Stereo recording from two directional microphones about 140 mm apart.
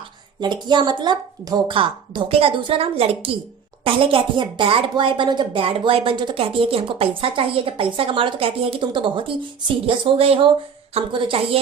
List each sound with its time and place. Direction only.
0.3 s speech: 30° right (ahead or behind)